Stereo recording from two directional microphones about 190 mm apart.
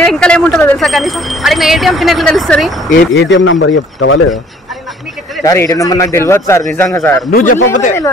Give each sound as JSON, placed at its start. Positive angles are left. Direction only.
{"t": 0.0, "sound": "speech", "side_deg": 5}
{"t": 2.9, "sound": "speech", "side_deg": 60}
{"t": 5.4, "sound": "a man's voice", "side_deg": 15}
{"t": 7.2, "sound": "a man's voice", "side_deg": 45}